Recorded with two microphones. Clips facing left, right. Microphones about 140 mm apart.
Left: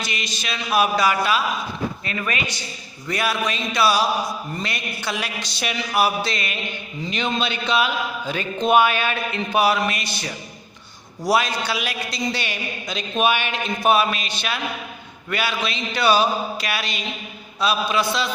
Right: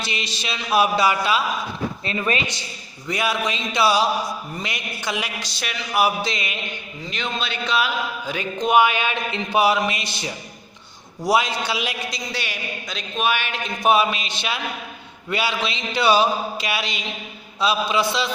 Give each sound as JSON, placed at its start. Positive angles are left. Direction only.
{"t": 0.0, "sound": "speech", "side_deg": -30}
{"t": 4.5, "sound": "music", "side_deg": -15}
{"t": 5.5, "sound": "a man's voice", "side_deg": 0}
{"t": 6.0, "sound": "music", "side_deg": -20}
{"t": 7.1, "sound": "a man's voice", "side_deg": 0}
{"t": 8.3, "sound": "music", "side_deg": -15}
{"t": 11.3, "sound": "speech", "side_deg": -20}
{"t": 12.3, "sound": "music", "side_deg": -5}
{"t": 13.1, "sound": "a man's voice", "side_deg": 0}
{"t": 13.8, "sound": "speech", "side_deg": -20}